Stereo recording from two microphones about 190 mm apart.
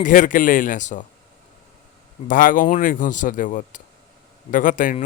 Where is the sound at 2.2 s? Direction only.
45° left (ahead or behind).